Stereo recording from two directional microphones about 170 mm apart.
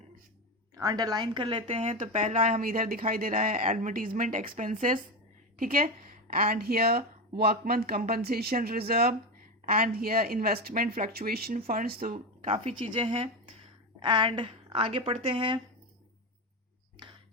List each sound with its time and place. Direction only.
0.8 s speech: 20° right (ahead or behind); by 12.1 s 55° right (ahead or behind)
12.1 s speech: 35° right (ahead or behind)